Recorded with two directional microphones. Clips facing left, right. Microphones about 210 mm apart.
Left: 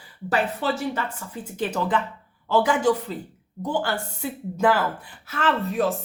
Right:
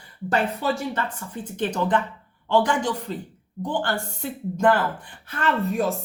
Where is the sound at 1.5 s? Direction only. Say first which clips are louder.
Right 1 dB; 5° left (ahead or behind).